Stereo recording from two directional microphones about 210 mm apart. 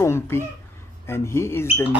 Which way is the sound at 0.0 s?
10° left (ahead or behind).